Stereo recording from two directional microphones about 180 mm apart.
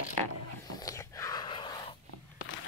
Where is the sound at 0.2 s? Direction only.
35° right (ahead or behind).